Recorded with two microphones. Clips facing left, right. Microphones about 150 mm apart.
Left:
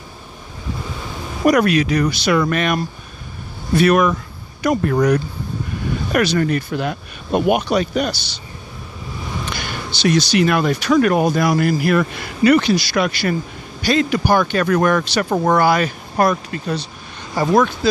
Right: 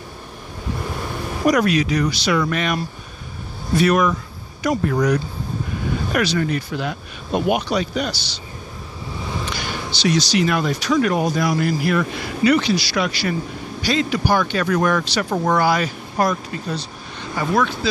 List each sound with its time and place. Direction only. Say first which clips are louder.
1.5 s speech: left 3 dB; 60° left (ahead or behind)
9.9 s speech: left 3 dB; 55° left (ahead or behind)
17.4 s speech: left 5 dB; 45° left (ahead or behind)